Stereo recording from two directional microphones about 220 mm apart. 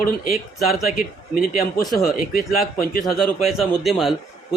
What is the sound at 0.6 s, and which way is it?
Speech, centre (ahead or behind).